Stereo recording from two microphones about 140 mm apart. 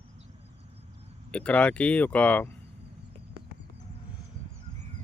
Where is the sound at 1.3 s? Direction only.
10° left (ahead or behind).